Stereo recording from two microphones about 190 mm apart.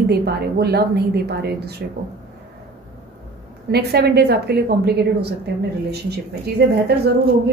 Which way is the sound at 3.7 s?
55° right (ahead or behind).